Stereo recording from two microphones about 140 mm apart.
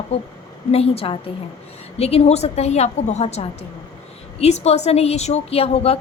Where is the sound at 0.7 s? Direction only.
45° left (ahead or behind).